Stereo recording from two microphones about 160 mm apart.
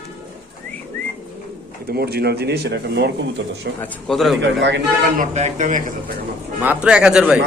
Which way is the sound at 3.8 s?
5° left (ahead or behind).